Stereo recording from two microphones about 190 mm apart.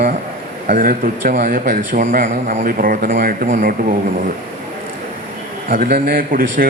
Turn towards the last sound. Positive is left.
turn(degrees=-50)  # may be behind; listen again after turning